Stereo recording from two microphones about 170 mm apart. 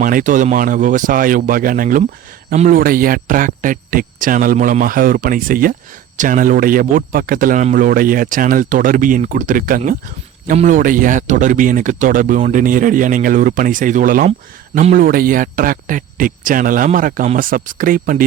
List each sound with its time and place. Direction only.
0.0 s a man's voice: 50° right (ahead or behind)